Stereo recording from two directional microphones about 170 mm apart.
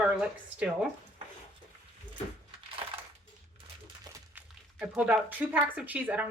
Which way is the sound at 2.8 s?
30° right (ahead or behind).